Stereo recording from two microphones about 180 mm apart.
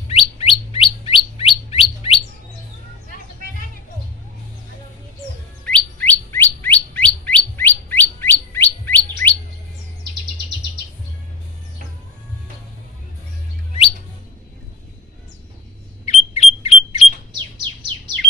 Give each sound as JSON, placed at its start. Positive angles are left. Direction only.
{"t": 0.1, "sound": "bird", "side_deg": 35}
{"t": 5.7, "sound": "bird", "side_deg": 10}
{"t": 16.1, "sound": "alarm", "side_deg": 35}